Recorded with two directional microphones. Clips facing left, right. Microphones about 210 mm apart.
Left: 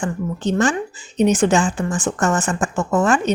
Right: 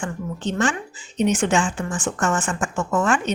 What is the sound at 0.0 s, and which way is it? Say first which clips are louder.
A woman's voice: left 5 dB; 40° left (ahead or behind).